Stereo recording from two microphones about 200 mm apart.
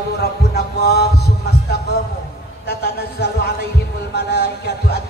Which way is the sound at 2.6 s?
55° left (ahead or behind).